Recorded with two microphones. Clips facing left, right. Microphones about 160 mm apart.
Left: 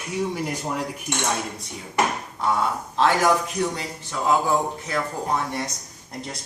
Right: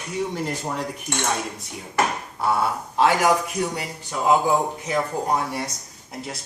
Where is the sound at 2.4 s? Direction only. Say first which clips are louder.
Right 1 dB; 10° right (ahead or behind).